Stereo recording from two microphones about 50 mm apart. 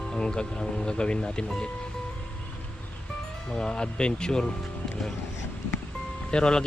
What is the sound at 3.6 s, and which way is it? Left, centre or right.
Speech, centre.